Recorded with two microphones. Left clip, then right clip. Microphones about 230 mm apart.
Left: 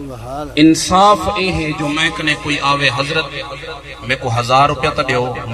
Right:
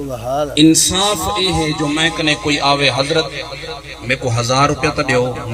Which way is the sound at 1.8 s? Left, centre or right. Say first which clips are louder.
Left 2 dB; left.